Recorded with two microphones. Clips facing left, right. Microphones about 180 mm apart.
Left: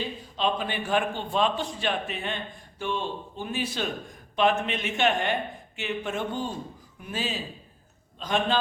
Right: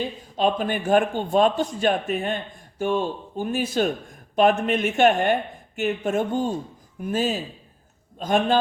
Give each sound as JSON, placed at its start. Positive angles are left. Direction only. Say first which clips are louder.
{"t": 0.0, "sound": "a man's voice", "louder": "right 5 dB", "side_deg": -50}